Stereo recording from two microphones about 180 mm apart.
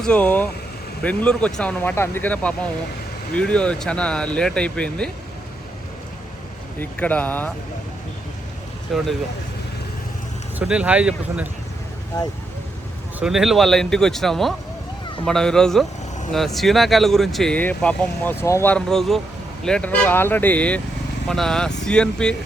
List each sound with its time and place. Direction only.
0.0 s speech: 5° left (ahead or behind)
6.7 s speech: 10° left (ahead or behind)
8.9 s speech: centre (ahead or behind)
10.6 s speech: 5° right (ahead or behind)
12.1 s speech: 20° left (ahead or behind)
13.1 s speech: 5° right (ahead or behind)